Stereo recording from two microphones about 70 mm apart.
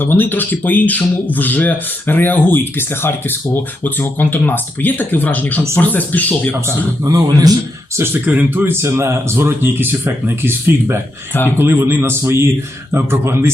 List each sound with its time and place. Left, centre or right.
0.0 s speech: left
7.0 s a man's voice: right
7.9 s speech: right